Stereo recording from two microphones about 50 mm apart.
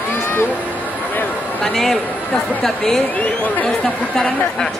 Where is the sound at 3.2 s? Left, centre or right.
Left.